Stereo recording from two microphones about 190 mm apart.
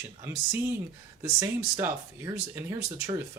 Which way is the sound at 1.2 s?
15° right (ahead or behind).